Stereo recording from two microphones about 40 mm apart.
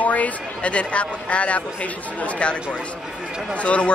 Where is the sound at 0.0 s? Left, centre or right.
Left.